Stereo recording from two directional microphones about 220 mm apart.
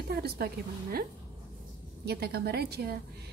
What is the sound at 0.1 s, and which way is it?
Speech, 45° right (ahead or behind).